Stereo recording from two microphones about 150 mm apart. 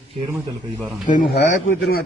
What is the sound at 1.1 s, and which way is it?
Speech, 65° left (ahead or behind).